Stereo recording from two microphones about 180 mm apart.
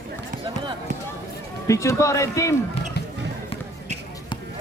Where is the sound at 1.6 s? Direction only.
15° left (ahead or behind).